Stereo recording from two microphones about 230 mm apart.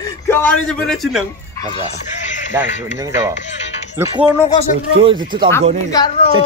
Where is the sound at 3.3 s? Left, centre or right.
Left.